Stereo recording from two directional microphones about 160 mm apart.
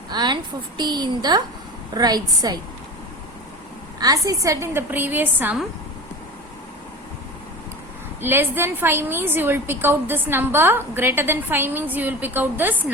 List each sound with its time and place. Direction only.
0.1 s a woman's voice: 25° right (ahead or behind)
4.0 s a woman's voice: 20° right (ahead or behind)
8.2 s a woman's voice: 15° right (ahead or behind)